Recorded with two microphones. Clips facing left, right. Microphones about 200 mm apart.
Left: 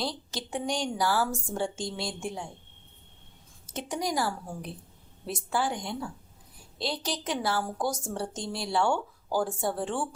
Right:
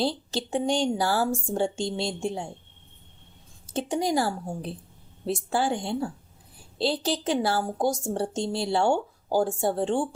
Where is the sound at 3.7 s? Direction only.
25° right (ahead or behind).